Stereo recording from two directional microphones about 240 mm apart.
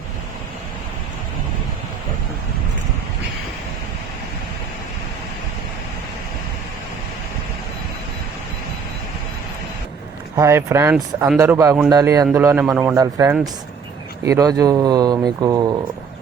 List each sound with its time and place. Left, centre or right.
10.3 s a man's voice: centre